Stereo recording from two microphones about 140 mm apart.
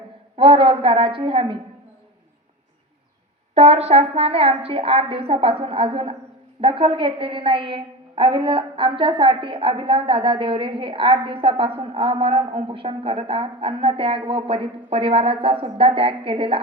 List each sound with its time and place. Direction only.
0.3 s a woman's voice: 40° right (ahead or behind)
3.5 s a woman's voice: 45° right (ahead or behind)